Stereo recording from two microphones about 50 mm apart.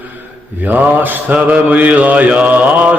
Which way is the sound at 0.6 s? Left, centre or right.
Right.